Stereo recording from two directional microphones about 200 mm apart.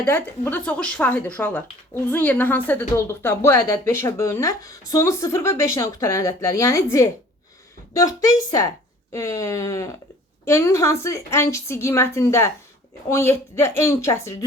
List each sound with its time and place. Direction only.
0.0 s a woman's voice: 10° left (ahead or behind)